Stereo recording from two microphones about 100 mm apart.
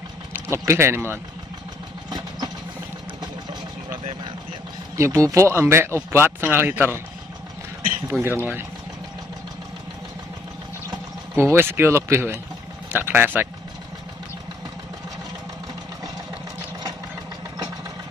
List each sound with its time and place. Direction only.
0.3 s speech: 25° right (ahead or behind)
2.0 s vehicle: 45° right (ahead or behind)
4.9 s speech: 30° right (ahead or behind)
8.1 s speech: 20° right (ahead or behind)
11.3 s speech: 25° right (ahead or behind)